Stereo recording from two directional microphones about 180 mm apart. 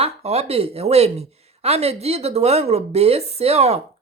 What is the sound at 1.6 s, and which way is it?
Speech, 35° right (ahead or behind).